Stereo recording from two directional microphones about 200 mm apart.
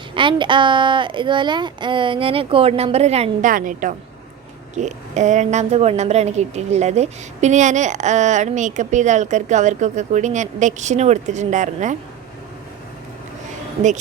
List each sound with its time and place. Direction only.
0.1 s a woman's voice: 25° right (ahead or behind)